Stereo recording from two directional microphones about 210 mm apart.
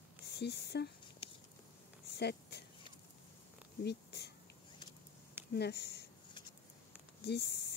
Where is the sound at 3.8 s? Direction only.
50° left (ahead or behind).